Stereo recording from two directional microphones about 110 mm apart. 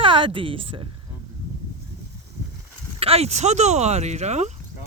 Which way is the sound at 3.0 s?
65° right (ahead or behind).